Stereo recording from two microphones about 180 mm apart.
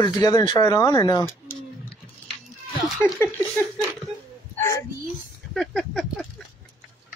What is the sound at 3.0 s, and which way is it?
Speech, 10° left (ahead or behind).